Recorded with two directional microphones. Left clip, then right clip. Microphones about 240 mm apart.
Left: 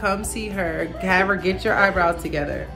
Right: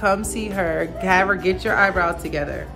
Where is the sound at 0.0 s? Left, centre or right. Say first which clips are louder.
Right 3 dB; centre.